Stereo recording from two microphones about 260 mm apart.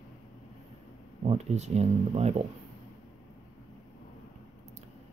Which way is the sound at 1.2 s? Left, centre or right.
Right.